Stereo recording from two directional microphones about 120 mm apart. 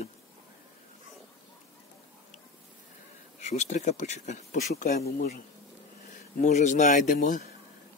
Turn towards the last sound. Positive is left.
turn(degrees=90)